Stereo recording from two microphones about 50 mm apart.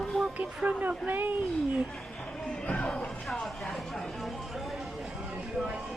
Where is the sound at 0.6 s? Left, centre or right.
Right.